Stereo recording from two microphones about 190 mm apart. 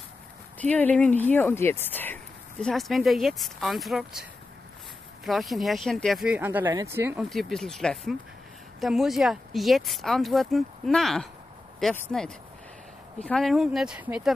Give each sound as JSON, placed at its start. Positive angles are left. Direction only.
{"t": 0.6, "sound": "speech", "side_deg": 10}
{"t": 7.2, "sound": "speech", "side_deg": 0}